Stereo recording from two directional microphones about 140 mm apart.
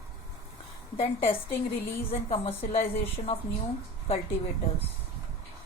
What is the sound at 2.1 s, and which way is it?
A woman's voice, 45° left (ahead or behind).